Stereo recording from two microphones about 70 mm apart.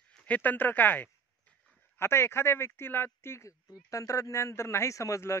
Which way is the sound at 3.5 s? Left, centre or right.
Left.